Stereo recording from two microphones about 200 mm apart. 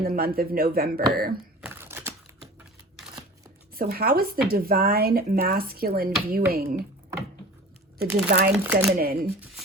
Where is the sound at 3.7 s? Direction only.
50° right (ahead or behind).